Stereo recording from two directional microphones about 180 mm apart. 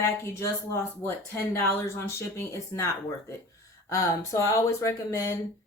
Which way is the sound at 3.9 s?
15° left (ahead or behind).